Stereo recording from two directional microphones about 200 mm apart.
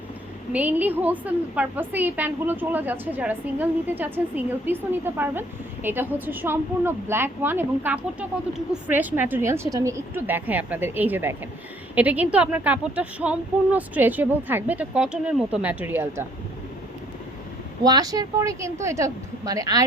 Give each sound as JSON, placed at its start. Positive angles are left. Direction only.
{"t": 0.5, "sound": "a woman's voice", "side_deg": -10}
{"t": 17.8, "sound": "a woman's voice", "side_deg": -20}